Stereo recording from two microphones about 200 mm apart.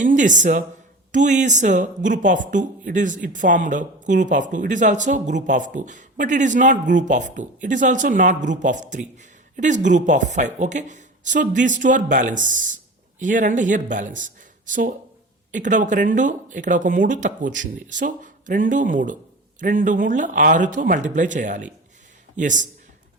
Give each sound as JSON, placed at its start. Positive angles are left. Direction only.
{"t": 0.0, "sound": "speech", "side_deg": -40}